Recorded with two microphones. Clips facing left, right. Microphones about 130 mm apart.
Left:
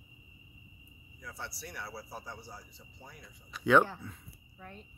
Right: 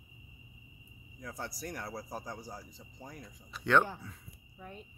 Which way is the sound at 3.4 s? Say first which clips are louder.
Left 3 dB; centre (ahead or behind).